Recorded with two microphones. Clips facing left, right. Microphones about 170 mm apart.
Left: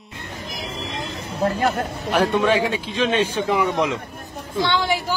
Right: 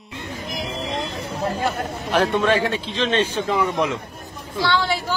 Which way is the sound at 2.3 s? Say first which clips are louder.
Left 1 dB; 15° left (ahead or behind).